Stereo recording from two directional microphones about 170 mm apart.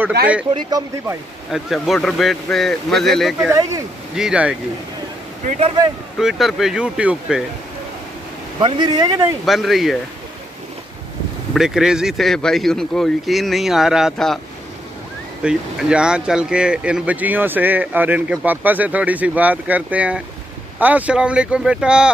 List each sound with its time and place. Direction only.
0.6 s speech: 25° right (ahead or behind)
1.5 s speech: centre (ahead or behind)
6.1 s speech: centre (ahead or behind)
8.5 s speech: 25° right (ahead or behind)
9.5 s speech: centre (ahead or behind)
11.5 s speech: centre (ahead or behind)
15.4 s speech: 5° right (ahead or behind)